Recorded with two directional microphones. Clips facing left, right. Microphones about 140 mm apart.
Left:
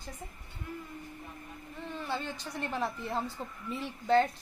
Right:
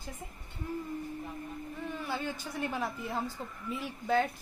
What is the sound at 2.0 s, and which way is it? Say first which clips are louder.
A woman's voice: left 1 dB; 5° right (ahead or behind).